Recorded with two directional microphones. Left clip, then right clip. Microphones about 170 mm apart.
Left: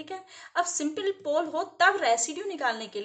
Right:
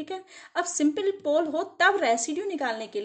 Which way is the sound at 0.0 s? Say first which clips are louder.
Right 3 dB; 45° right (ahead or behind).